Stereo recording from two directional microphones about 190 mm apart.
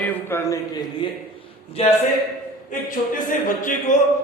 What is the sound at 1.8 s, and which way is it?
Speech, 30° left (ahead or behind).